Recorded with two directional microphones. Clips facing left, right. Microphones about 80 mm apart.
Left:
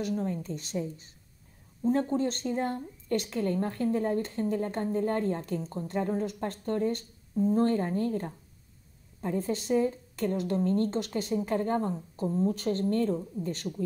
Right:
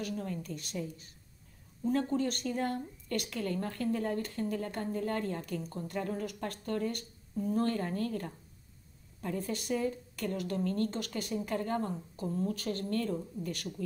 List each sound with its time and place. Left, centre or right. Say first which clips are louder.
0.0 s speech: left 6 dB; left